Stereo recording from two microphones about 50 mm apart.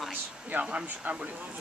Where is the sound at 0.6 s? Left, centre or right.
Right.